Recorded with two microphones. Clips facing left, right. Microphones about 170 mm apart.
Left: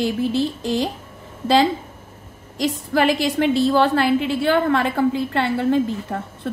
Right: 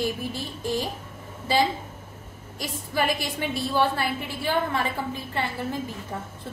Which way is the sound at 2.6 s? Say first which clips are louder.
Left 8 dB; 90° left.